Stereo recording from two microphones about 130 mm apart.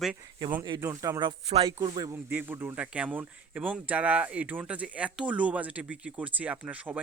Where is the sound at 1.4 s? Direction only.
35° right (ahead or behind).